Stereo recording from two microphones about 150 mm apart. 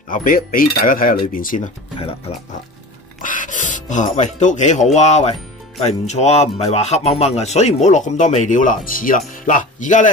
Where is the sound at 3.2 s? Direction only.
60° left (ahead or behind).